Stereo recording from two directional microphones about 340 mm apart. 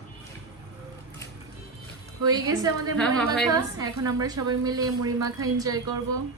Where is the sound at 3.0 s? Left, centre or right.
Centre.